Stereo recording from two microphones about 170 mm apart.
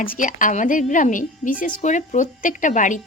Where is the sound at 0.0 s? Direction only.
55° left (ahead or behind).